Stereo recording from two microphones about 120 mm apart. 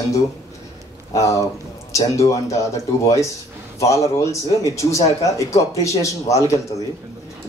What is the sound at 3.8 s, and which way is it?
A man's voice, 25° left (ahead or behind).